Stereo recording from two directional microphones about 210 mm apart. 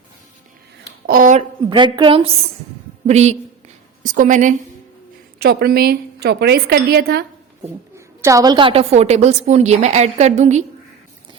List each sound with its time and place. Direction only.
1.0 s a woman's voice: 40° right (ahead or behind)
5.4 s a woman's voice: 50° right (ahead or behind)
7.9 s a woman's voice: 15° right (ahead or behind); by 10.7 s 35° right (ahead or behind)